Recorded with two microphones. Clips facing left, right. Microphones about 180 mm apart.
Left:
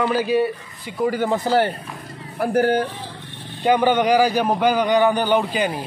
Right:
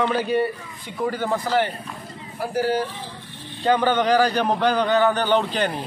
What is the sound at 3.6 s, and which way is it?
A man's voice, 15° left (ahead or behind).